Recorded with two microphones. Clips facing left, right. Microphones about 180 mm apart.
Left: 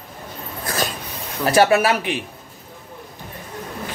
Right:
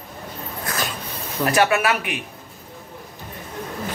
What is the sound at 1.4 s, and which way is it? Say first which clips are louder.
Speech: left 3 dB; 30° left (ahead or behind).